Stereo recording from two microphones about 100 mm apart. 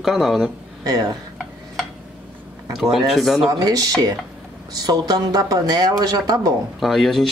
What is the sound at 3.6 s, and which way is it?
Speech, 35° right (ahead or behind).